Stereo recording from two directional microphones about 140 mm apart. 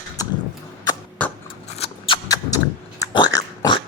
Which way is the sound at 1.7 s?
45° left (ahead or behind).